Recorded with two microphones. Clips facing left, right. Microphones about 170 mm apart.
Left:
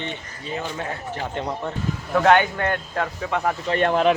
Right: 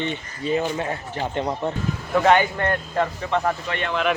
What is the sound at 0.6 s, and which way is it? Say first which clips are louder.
Speech: right 1 dB; 20° right (ahead or behind).